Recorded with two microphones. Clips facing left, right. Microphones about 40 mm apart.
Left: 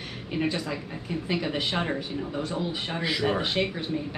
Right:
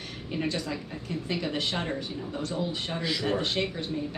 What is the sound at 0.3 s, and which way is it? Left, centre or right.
Speech, centre.